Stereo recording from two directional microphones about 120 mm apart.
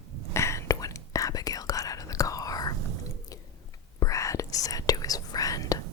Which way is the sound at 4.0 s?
25° left (ahead or behind).